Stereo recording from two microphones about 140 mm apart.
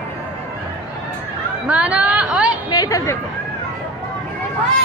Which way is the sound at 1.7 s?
10° right (ahead or behind).